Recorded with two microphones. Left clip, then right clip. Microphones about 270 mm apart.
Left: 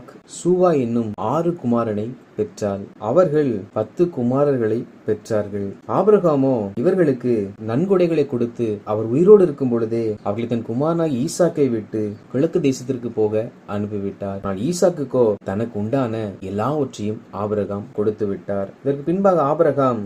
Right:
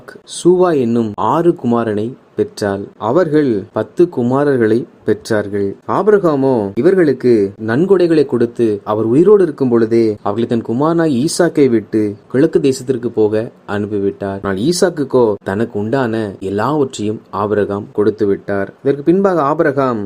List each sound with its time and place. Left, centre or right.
0.4 s a man's voice: right